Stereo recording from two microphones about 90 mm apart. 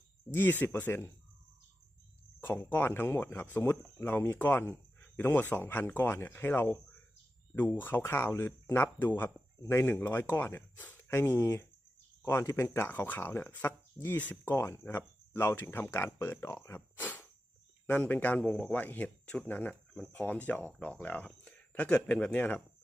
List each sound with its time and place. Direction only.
0.3 s speech: 25° left (ahead or behind)
2.4 s speech: 25° left (ahead or behind)